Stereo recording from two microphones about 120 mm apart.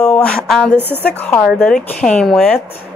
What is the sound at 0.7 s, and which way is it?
Speech, 15° right (ahead or behind).